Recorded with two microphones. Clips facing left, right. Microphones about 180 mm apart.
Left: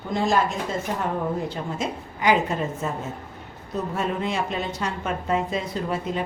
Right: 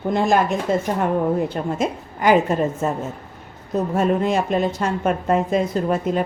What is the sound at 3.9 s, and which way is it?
A woman's voice, 45° right (ahead or behind).